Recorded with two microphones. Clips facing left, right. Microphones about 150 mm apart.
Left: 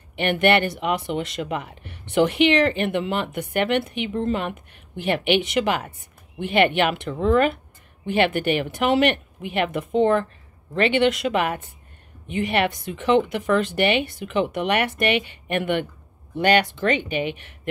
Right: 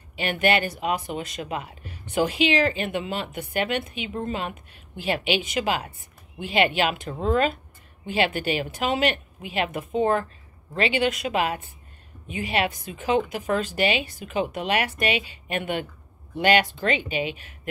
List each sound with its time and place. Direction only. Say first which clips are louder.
0.1 s speech: left 4 dB; 65° left (ahead or behind)
8.2 s speech: left 4 dB; 60° left (ahead or behind)